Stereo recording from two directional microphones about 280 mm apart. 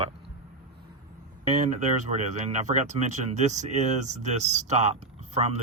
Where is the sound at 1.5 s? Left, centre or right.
Right.